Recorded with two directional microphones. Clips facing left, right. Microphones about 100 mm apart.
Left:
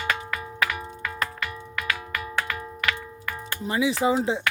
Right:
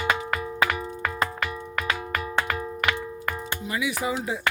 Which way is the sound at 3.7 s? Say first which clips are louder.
Left 6 dB; 30° left (ahead or behind).